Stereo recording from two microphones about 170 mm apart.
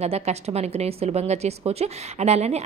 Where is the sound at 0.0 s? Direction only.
40° right (ahead or behind).